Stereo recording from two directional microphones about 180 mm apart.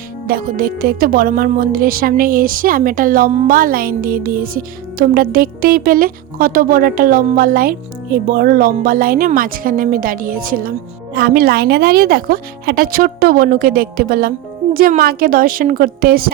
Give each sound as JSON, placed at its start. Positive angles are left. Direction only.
{"t": 0.3, "sound": "a woman's voice", "side_deg": -55}